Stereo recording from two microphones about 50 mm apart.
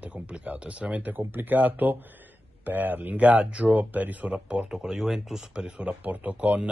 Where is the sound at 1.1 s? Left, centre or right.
Right.